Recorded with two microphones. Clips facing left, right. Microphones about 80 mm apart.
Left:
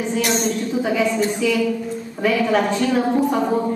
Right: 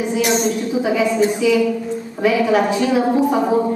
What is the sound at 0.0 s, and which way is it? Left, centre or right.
A woman's voice, centre.